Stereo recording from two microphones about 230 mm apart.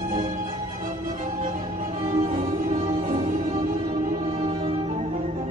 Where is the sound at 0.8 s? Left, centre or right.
Right.